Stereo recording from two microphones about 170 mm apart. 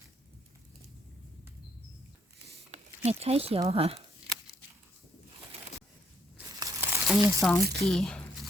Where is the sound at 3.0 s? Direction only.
35° right (ahead or behind).